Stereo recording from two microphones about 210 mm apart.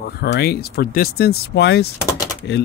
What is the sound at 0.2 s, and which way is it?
Speech, 50° left (ahead or behind).